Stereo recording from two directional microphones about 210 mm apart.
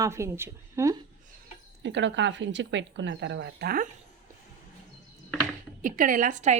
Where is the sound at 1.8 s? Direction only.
60° right (ahead or behind).